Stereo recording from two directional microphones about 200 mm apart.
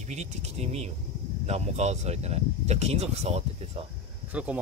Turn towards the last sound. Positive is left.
turn(degrees=-5)  # may be behind; listen again after turning